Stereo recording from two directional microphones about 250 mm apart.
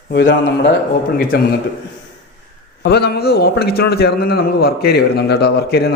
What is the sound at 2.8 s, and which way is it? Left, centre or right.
A man's voice, left.